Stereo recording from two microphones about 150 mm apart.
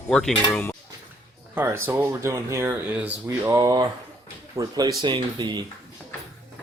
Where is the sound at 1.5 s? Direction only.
15° right (ahead or behind).